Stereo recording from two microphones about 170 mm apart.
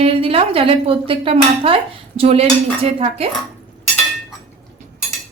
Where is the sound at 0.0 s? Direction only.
35° right (ahead or behind).